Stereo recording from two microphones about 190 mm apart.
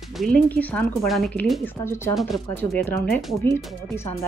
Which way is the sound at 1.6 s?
15° left (ahead or behind).